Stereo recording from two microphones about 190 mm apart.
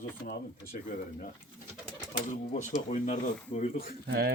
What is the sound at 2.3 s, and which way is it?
Speech, 40° left (ahead or behind).